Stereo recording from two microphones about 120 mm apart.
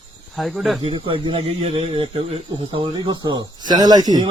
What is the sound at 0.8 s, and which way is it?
Speech, 50° right (ahead or behind).